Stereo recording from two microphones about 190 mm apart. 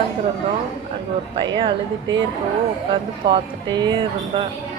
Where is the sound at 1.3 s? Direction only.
25° right (ahead or behind).